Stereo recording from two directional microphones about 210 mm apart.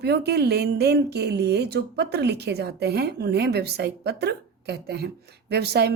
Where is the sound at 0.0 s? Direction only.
50° right (ahead or behind).